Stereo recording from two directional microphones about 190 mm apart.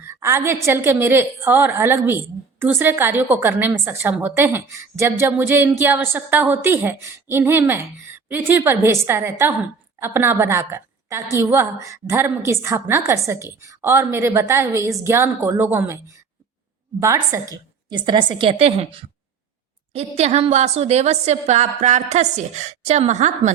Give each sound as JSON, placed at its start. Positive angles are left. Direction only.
{"t": 0.0, "sound": "a woman's voice", "side_deg": -15}
{"t": 17.0, "sound": "a woman's voice", "side_deg": -15}